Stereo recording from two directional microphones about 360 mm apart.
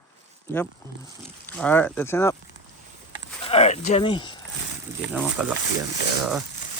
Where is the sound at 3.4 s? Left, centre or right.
Centre.